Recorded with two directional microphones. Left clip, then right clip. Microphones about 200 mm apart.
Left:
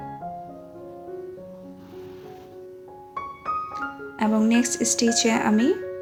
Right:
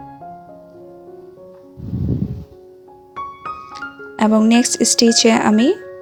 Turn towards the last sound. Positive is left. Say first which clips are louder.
# right 7 dB
turn(degrees=-40)  # may be behind; listen again after turning